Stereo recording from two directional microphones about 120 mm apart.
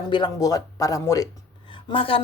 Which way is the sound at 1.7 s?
45° left (ahead or behind).